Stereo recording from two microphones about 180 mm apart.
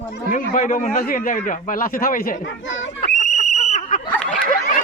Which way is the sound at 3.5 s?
40° left (ahead or behind).